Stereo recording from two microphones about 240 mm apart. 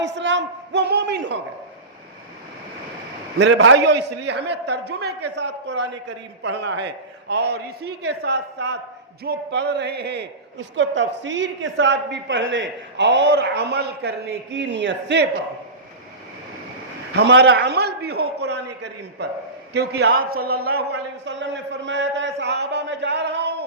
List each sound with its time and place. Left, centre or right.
0.0 s a man's voice: right
3.3 s a man's voice: right
17.2 s a man's voice: right